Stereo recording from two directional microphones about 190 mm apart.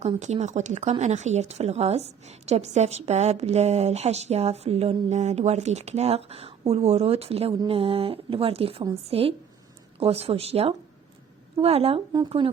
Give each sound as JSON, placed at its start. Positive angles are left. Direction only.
{"t": 0.0, "sound": "a woman's voice", "side_deg": -35}